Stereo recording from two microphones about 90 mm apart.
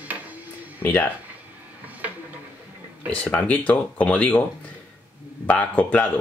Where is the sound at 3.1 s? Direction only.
15° left (ahead or behind).